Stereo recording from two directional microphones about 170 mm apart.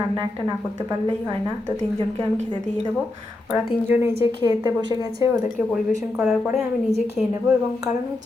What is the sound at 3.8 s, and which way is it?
Speech, 15° right (ahead or behind).